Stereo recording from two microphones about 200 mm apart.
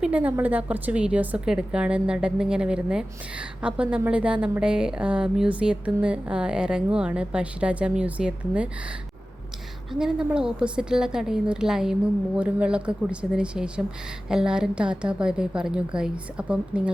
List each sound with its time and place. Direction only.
0.0 s a woman's voice: 5° right (ahead or behind)
9.9 s a woman's voice: 5° right (ahead or behind)